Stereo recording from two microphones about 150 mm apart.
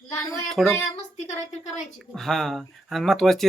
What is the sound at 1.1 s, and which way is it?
Speech, 45° left (ahead or behind).